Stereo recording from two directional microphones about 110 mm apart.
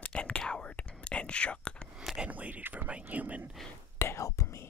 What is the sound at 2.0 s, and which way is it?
Speech, 5° right (ahead or behind).